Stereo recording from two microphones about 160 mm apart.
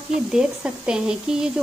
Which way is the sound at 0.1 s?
5° right (ahead or behind).